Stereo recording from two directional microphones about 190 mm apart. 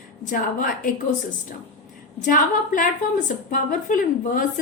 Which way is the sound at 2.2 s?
45° left (ahead or behind).